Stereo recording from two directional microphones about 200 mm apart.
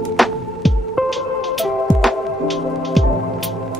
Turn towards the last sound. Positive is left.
turn(degrees=0)  # may be behind; listen again after turning